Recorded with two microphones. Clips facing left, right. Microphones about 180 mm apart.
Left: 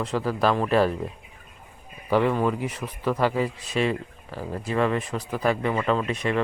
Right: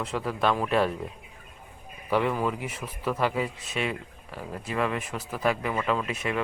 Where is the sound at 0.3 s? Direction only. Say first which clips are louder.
Left 3 dB; centre (ahead or behind).